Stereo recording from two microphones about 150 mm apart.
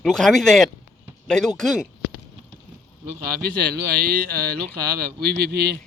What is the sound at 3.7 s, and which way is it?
Speech, 75° right (ahead or behind).